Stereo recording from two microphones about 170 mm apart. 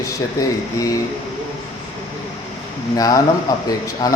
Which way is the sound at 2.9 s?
20° left (ahead or behind).